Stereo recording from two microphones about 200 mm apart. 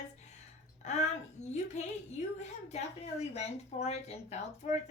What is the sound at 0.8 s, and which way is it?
A woman's voice, 35° left (ahead or behind).